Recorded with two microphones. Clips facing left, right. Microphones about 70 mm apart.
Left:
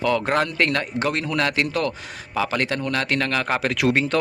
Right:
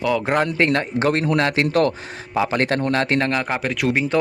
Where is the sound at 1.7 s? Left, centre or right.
Right.